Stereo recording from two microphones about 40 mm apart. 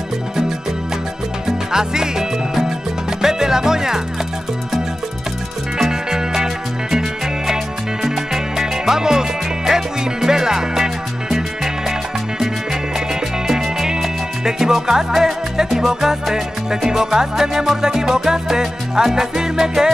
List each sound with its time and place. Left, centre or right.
1.7 s music: centre
5.8 s music: centre
13.1 s music: centre